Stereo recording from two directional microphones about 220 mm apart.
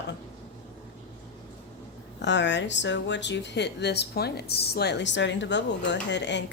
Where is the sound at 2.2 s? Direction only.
55° left (ahead or behind).